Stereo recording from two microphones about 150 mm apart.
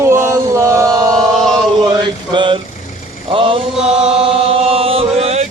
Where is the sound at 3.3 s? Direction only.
35° right (ahead or behind).